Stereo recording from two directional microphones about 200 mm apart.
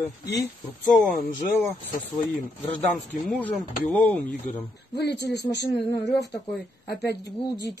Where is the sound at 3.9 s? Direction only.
10° left (ahead or behind).